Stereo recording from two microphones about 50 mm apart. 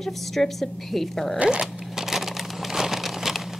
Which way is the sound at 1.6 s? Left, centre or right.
Centre.